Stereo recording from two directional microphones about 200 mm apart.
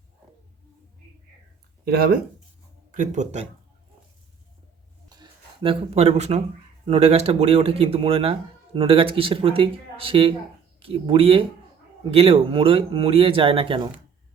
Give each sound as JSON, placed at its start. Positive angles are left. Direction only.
{"t": 1.8, "sound": "speech", "side_deg": -50}
{"t": 2.9, "sound": "speech", "side_deg": -40}
{"t": 5.0, "sound": "a sound", "side_deg": -20}
{"t": 6.8, "sound": "speech", "side_deg": -30}